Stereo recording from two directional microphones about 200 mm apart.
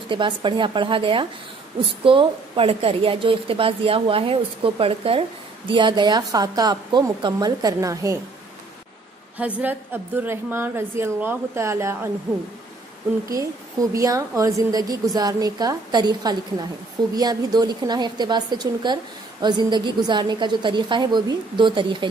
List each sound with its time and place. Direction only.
0.1 s a woman's voice: 25° right (ahead or behind)
9.4 s speech: 10° right (ahead or behind)
13.9 s a woman's voice: 15° right (ahead or behind)